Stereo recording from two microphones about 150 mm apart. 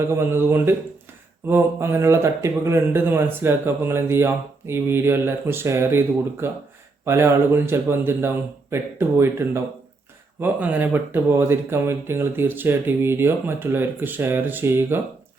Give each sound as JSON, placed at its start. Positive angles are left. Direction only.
{"t": 0.1, "sound": "speech", "side_deg": -15}